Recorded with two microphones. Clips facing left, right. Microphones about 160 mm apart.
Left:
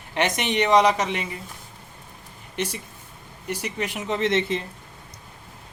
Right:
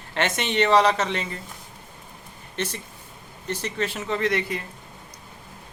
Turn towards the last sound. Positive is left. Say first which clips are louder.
# left 2 dB
turn(degrees=25)  # may be behind; listen again after turning